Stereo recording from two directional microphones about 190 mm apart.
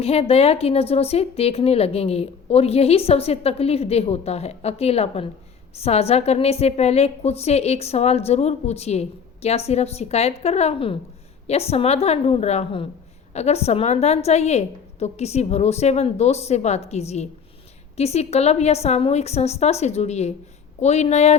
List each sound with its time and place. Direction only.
0.0 s speech: 30° left (ahead or behind)